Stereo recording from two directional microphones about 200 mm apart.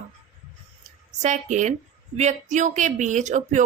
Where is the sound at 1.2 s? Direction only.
35° right (ahead or behind).